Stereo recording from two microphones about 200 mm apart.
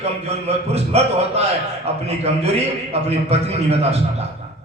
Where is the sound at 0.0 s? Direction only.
30° right (ahead or behind).